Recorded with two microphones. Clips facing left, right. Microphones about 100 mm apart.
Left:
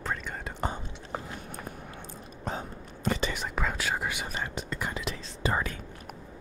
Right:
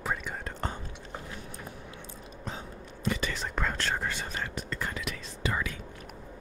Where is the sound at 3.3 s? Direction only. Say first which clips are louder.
Left 1 dB; 5° left (ahead or behind); by 5.7 s 35° left (ahead or behind).